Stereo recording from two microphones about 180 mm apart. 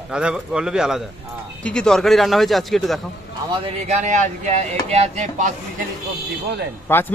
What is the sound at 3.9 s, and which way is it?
Speech, 40° right (ahead or behind).